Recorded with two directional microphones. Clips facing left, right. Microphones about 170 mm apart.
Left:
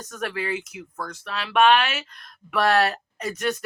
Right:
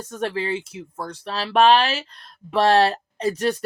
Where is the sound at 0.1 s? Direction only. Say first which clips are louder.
Right 3 dB; 30° right (ahead or behind).